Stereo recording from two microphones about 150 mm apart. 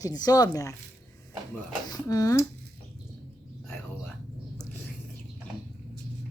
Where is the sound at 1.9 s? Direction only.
25° left (ahead or behind).